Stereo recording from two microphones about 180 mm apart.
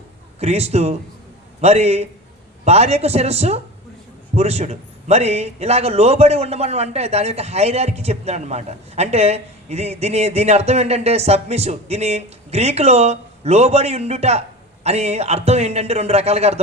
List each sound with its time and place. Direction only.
0.3 s a man's voice: 35° right (ahead or behind)